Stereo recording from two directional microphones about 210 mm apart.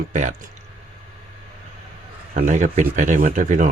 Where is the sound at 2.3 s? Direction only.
35° right (ahead or behind).